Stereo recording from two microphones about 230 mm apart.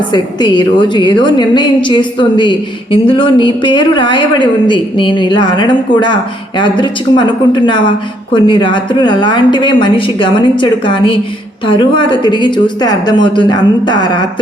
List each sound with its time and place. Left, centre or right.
0.1 s a woman's voice: centre